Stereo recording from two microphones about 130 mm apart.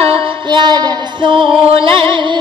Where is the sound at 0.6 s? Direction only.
35° right (ahead or behind).